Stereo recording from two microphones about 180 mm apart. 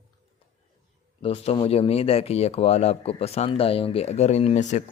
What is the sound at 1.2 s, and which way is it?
Speech, 35° left (ahead or behind).